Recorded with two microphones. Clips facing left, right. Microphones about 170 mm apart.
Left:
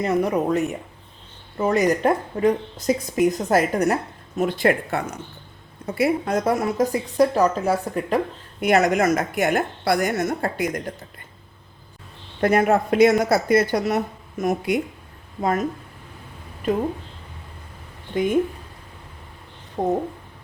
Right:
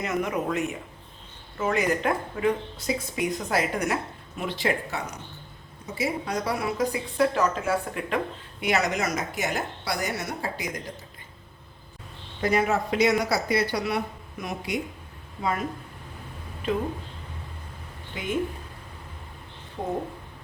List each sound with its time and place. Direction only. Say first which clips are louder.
0.0 s a woman's voice: left 7 dB; 35° left (ahead or behind)
8.6 s a woman's voice: left 8 dB; 50° left (ahead or behind)
12.4 s a woman's voice: left 6 dB; 55° left (ahead or behind)
18.1 s speech: left 10 dB; 45° left (ahead or behind)
19.8 s a woman's voice: left 8 dB; 45° left (ahead or behind)